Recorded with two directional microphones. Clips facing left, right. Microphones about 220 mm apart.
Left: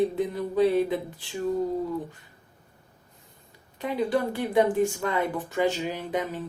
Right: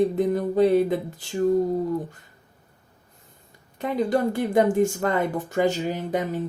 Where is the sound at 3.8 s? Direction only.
45° right (ahead or behind).